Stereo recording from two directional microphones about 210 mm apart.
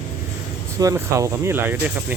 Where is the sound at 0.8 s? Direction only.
15° right (ahead or behind).